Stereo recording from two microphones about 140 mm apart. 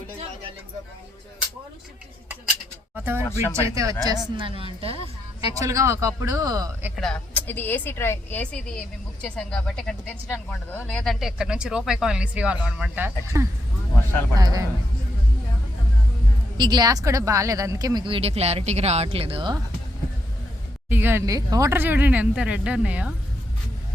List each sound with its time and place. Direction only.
2.9 s speech: 15° right (ahead or behind); by 5.0 s 40° right (ahead or behind)
5.5 s speech: 20° right (ahead or behind)
6.9 s a woman's voice: 5° left (ahead or behind); by 14.7 s 25° right (ahead or behind)
16.6 s speech: 30° right (ahead or behind)
20.9 s speech: 15° right (ahead or behind)